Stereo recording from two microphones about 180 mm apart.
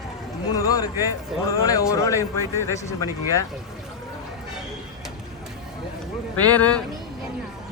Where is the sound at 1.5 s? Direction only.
20° left (ahead or behind).